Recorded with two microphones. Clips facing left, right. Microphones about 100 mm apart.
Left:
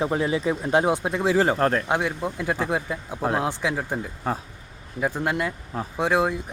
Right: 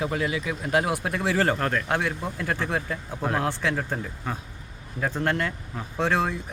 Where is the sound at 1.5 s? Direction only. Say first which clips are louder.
Left 5 dB; 35° left (ahead or behind).